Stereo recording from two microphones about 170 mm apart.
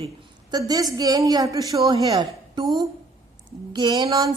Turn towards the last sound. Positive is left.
turn(degrees=-25)  # may be behind; listen again after turning